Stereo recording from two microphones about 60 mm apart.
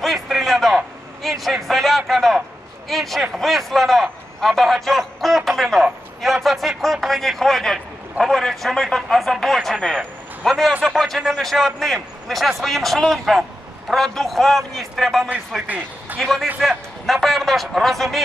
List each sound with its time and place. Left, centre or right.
0.0 s a sound: centre
1.2 s a man's voice: centre
15.6 s speech: right
16.2 s a man's voice: centre